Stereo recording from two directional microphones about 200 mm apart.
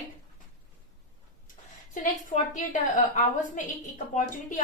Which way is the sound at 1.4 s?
40° left (ahead or behind).